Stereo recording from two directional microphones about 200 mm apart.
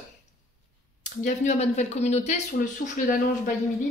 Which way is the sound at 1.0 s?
35° left (ahead or behind).